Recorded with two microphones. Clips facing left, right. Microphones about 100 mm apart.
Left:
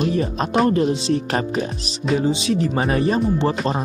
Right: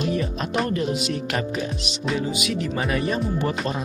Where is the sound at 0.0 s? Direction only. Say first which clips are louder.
Left 4 dB; 35° left (ahead or behind).